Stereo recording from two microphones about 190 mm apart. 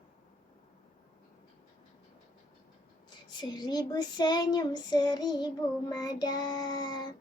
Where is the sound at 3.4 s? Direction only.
20° left (ahead or behind).